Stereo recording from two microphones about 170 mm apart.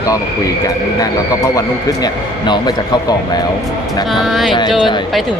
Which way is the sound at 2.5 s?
25° left (ahead or behind).